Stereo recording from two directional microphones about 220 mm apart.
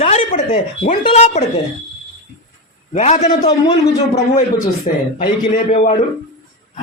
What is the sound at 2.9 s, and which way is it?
Speech, 30° left (ahead or behind).